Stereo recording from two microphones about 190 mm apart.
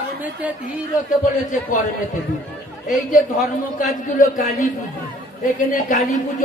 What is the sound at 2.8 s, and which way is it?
Speech, 40° left (ahead or behind).